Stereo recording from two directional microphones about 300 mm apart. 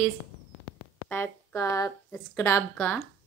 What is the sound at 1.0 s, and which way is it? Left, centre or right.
Speech, centre.